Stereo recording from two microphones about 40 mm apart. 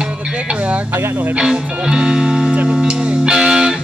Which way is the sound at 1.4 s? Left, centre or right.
Centre.